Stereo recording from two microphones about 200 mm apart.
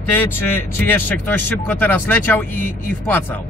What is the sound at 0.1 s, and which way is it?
Speech, 10° left (ahead or behind).